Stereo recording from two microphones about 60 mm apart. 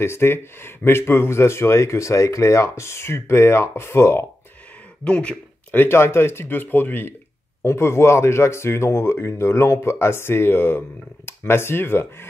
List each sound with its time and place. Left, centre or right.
0.0 s speech: left
5.0 s speech: centre
5.7 s speech: left
7.6 s speech: left